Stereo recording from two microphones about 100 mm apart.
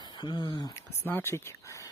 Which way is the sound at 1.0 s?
25° left (ahead or behind).